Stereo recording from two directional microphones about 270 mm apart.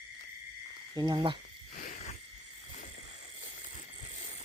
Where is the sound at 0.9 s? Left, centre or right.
Centre.